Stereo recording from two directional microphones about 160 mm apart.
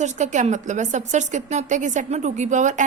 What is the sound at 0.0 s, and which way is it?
A woman's voice, 50° right (ahead or behind).